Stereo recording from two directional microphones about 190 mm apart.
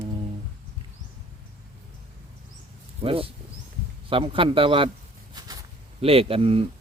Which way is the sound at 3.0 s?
30° right (ahead or behind).